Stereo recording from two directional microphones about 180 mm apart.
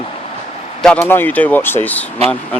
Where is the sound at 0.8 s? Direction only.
5° left (ahead or behind).